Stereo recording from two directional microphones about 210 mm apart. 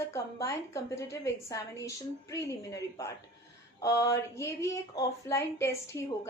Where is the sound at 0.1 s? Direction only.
15° left (ahead or behind).